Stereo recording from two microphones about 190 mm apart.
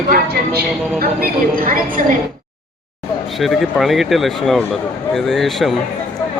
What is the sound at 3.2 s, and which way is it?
Speech, centre (ahead or behind).